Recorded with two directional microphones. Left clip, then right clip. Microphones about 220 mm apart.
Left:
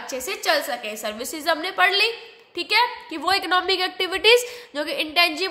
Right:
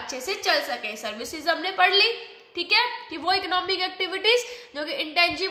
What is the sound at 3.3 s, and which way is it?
A woman's voice, 50° left (ahead or behind).